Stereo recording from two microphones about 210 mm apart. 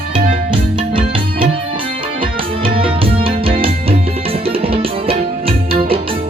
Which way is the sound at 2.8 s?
25° right (ahead or behind).